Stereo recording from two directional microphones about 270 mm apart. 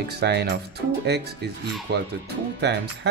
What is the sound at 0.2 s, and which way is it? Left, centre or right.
Speech, right.